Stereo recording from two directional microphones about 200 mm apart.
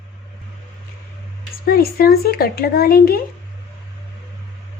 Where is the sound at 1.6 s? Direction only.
50° left (ahead or behind).